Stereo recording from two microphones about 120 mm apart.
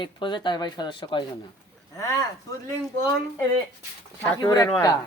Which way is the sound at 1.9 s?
30° left (ahead or behind).